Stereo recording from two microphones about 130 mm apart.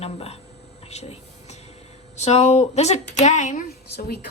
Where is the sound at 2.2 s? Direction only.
55° left (ahead or behind).